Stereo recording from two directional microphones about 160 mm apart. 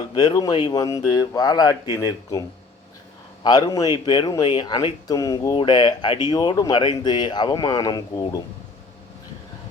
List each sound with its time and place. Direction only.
0.1 s speech: 25° left (ahead or behind)
3.4 s speech: 25° left (ahead or behind)